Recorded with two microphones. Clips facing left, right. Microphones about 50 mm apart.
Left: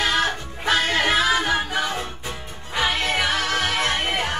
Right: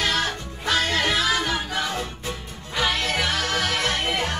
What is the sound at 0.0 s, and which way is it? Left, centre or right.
Music, centre.